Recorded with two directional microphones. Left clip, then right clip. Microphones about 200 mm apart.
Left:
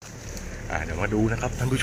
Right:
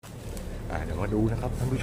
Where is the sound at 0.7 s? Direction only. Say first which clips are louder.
Left 4 dB; 5° right (ahead or behind).